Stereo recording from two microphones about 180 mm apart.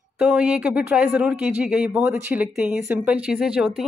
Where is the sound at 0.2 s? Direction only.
5° right (ahead or behind).